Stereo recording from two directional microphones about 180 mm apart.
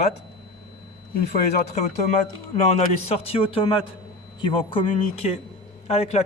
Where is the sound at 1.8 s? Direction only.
40° left (ahead or behind).